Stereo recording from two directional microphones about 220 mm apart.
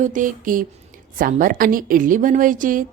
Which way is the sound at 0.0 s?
35° right (ahead or behind).